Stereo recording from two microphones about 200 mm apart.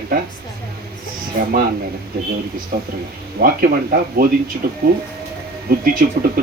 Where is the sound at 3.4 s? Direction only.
45° right (ahead or behind).